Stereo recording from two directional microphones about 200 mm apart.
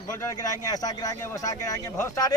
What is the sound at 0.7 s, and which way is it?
Speech, 20° left (ahead or behind).